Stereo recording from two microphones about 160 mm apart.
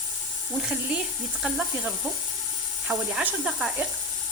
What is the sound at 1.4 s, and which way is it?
Sizzle, 5° right (ahead or behind).